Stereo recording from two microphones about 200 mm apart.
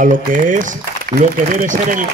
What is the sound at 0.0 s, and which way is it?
Speech, 40° right (ahead or behind).